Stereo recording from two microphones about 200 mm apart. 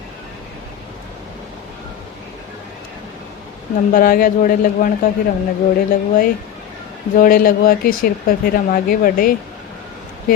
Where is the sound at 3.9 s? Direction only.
45° left (ahead or behind).